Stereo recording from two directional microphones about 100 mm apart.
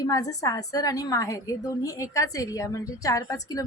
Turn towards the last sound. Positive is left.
turn(degrees=35)  # may be behind; listen again after turning